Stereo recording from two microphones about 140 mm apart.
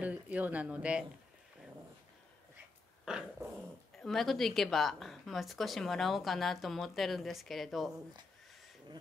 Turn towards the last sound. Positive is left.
turn(degrees=0)  # may be behind; listen again after turning